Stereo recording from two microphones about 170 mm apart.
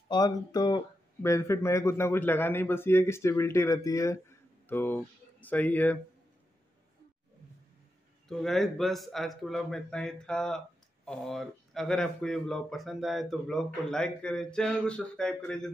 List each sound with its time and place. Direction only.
0.1 s speech: 25° left (ahead or behind)
8.3 s speech: centre (ahead or behind)